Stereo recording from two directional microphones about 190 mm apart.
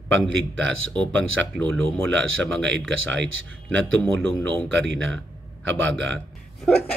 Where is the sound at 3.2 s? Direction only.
80° right.